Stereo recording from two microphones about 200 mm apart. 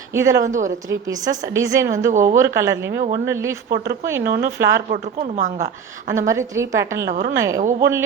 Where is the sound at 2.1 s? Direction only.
40° right (ahead or behind).